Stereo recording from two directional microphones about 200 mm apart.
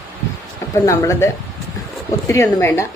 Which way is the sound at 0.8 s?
15° left (ahead or behind).